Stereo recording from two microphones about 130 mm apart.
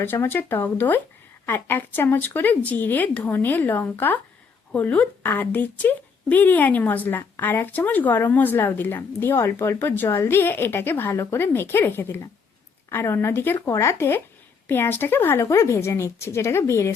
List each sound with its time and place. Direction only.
0.0 s speech: 15° left (ahead or behind)